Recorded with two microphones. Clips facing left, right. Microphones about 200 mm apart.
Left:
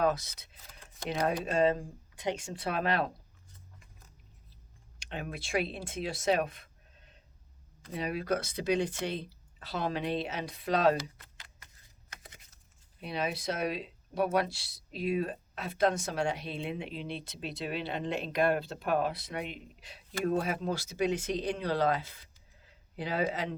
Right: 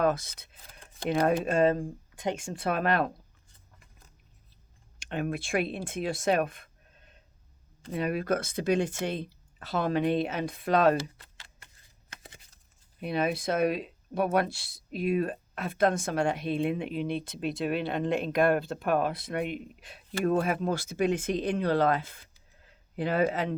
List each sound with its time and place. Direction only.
0.0 s speech: 50° right (ahead or behind)
4.9 s speech: 50° right (ahead or behind)
10.9 s a sound: 30° right (ahead or behind)
13.0 s speech: 55° right (ahead or behind)